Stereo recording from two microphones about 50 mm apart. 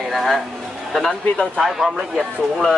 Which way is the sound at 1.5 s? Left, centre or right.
Centre.